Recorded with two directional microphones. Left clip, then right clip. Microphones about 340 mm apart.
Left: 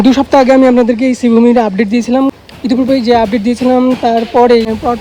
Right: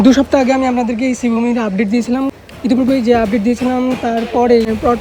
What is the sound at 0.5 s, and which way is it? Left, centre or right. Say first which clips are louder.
Speech: left 8 dB; left.